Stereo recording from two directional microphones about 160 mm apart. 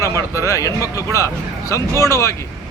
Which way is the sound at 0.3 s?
20° left (ahead or behind).